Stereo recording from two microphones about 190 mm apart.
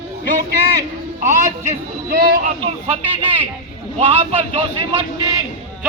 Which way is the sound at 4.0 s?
30° right (ahead or behind).